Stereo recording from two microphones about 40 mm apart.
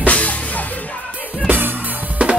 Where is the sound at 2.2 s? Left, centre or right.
Right.